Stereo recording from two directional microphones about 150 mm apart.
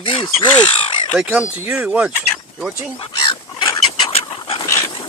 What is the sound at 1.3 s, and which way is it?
Speech, 10° right (ahead or behind).